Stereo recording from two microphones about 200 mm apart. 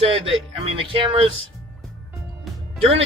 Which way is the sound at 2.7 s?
30° right (ahead or behind).